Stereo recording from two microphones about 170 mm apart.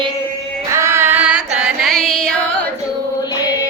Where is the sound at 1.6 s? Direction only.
Centre (ahead or behind).